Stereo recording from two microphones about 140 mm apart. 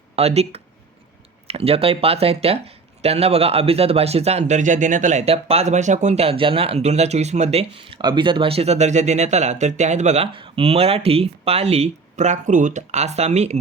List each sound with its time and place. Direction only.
0.2 s speech: 50° right (ahead or behind)